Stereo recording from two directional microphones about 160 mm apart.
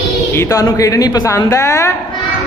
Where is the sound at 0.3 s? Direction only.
20° left (ahead or behind).